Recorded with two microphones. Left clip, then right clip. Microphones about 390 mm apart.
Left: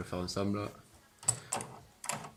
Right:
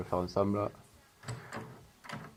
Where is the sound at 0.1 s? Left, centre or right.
Centre.